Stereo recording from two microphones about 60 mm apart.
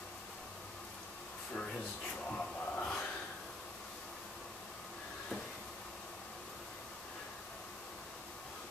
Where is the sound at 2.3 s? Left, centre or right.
Centre.